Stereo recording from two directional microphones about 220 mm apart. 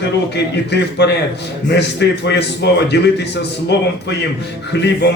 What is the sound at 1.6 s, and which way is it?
A man's voice, 50° left (ahead or behind).